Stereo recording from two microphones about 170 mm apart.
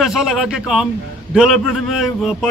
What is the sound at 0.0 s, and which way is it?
A man's voice, 5° right (ahead or behind).